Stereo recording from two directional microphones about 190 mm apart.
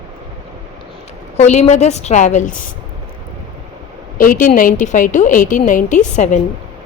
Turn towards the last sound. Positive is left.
turn(degrees=40)  # may be behind; listen again after turning